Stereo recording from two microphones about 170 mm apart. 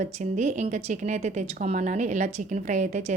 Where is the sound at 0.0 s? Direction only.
45° right (ahead or behind).